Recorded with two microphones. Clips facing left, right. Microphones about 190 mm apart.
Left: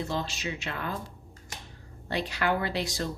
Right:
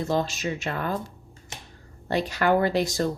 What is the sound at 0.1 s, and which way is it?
Speech, 45° right (ahead or behind).